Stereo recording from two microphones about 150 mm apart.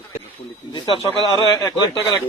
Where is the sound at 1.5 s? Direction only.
25° left (ahead or behind).